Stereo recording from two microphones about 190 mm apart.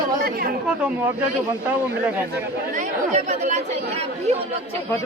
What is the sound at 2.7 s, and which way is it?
Speech, 40° right (ahead or behind).